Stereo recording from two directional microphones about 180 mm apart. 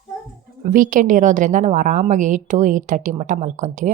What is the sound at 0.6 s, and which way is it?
A woman's voice, 50° right (ahead or behind).